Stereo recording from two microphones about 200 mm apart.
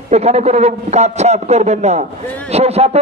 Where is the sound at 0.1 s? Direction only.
35° right (ahead or behind).